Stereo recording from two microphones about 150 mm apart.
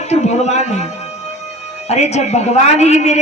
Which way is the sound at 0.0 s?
45° left (ahead or behind).